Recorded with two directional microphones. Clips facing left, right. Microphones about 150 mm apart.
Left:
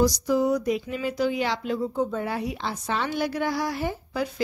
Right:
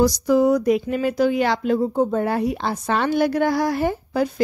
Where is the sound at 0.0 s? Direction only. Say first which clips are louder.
Right 5 dB; 60° right (ahead or behind).